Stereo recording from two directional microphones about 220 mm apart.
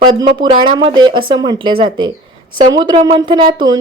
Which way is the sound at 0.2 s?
20° right (ahead or behind).